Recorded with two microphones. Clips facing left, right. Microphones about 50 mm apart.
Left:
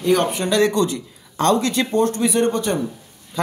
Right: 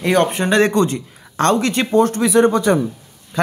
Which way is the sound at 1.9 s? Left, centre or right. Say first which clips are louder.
Right 5 dB; right.